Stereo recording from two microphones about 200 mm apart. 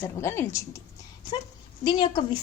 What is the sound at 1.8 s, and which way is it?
Speech, 25° left (ahead or behind).